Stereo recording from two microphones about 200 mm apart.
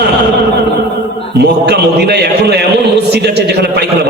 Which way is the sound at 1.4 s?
55° right (ahead or behind).